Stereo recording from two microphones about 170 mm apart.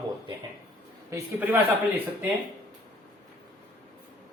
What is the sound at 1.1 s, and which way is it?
Speech, 10° right (ahead or behind).